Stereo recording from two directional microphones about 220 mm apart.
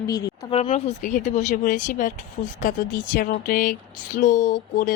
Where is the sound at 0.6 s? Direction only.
30° left (ahead or behind).